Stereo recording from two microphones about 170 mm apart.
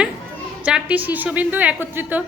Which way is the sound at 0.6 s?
10° right (ahead or behind).